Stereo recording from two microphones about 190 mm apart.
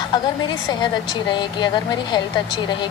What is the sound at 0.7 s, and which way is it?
A woman's voice, 25° left (ahead or behind).